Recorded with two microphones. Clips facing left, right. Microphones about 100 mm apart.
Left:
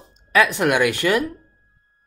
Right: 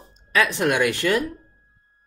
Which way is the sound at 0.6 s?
60° left (ahead or behind).